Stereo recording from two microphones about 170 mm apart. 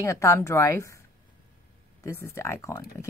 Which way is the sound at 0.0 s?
15° left (ahead or behind).